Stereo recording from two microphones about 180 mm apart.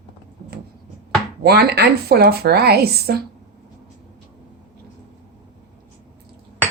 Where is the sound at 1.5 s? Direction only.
60° right (ahead or behind).